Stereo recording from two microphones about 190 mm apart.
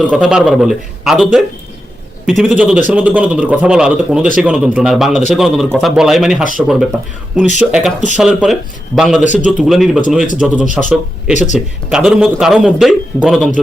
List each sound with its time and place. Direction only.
0.0 s a man's voice: 5° right (ahead or behind)
2.4 s a man's voice: 5° right (ahead or behind)
11.3 s speech: 40° left (ahead or behind)
11.9 s a man's voice: 5° right (ahead or behind)